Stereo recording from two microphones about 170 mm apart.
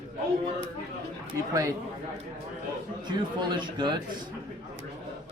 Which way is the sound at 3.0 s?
25° right (ahead or behind).